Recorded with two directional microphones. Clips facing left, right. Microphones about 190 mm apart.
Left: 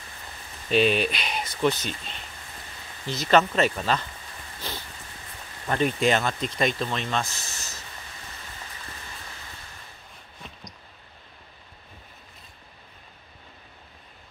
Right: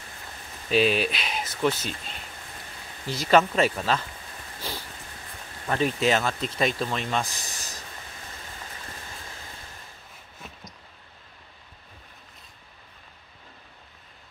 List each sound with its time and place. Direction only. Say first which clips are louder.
0.7 s speech: left 1 dB; centre (ahead or behind)
4.6 s a sound: right 1 dB; 10° right (ahead or behind)
5.7 s speech: left 1 dB; centre (ahead or behind)